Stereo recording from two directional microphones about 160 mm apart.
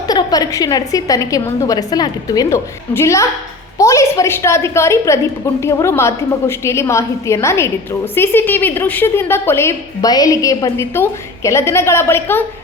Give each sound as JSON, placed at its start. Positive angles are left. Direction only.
{"t": 0.1, "sound": "a woman's voice", "side_deg": 25}